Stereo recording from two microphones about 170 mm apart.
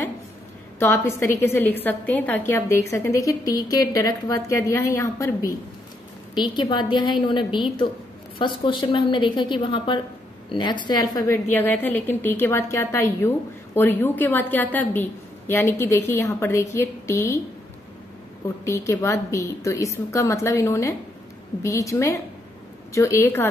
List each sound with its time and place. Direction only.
0.7 s a woman's voice: 15° left (ahead or behind)
11.1 s a woman's voice: 15° left (ahead or behind)
18.7 s a woman's voice: 20° left (ahead or behind)